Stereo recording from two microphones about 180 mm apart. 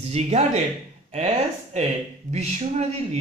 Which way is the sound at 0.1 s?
40° right (ahead or behind).